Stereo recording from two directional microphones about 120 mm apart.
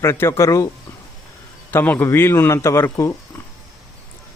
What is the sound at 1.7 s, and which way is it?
Speech, 15° left (ahead or behind).